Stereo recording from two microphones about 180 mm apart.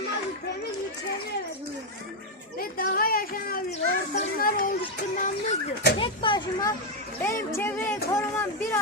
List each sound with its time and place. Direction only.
2.7 s speech: 55° left (ahead or behind)
3.7 s speech: 40° left (ahead or behind)
4.4 s speech: 55° left (ahead or behind)
6.0 s speech: 25° left (ahead or behind)
7.2 s speech: 15° left (ahead or behind)